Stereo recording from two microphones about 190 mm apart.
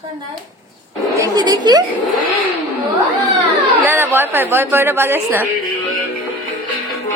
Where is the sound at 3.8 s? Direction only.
10° right (ahead or behind).